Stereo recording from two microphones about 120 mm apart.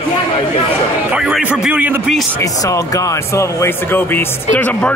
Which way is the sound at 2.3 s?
30° left (ahead or behind).